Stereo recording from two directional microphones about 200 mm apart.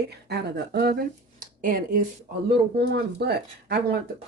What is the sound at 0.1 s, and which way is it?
Speech, 55° right (ahead or behind).